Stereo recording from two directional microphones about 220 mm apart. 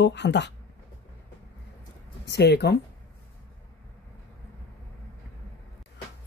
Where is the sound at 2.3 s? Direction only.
50° left (ahead or behind).